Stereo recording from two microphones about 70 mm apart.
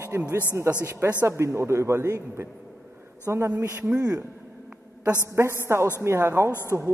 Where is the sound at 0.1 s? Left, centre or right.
Right.